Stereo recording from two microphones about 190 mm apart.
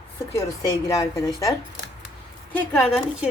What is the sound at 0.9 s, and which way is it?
Speech, 15° left (ahead or behind).